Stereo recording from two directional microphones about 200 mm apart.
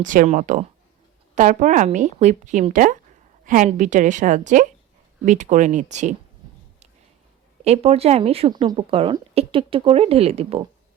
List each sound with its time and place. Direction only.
0.0 s speech: 40° right (ahead or behind)
7.6 s speech: 30° right (ahead or behind)